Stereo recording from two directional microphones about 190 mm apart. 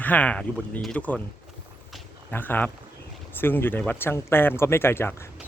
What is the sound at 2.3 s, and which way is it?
Speech, 10° left (ahead or behind).